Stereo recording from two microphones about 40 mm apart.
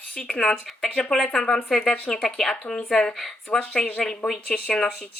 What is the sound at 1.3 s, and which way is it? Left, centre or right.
Speech, centre.